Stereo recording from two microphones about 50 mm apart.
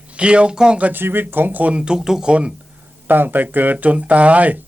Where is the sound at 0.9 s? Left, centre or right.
Right.